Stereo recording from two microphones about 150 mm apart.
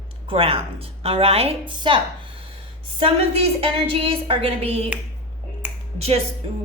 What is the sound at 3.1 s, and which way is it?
A woman's voice, 40° right (ahead or behind).